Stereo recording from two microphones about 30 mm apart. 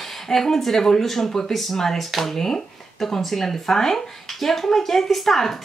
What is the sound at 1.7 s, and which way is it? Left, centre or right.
Speech, centre.